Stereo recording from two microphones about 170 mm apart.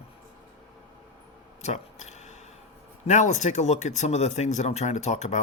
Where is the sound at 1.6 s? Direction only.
40° left (ahead or behind).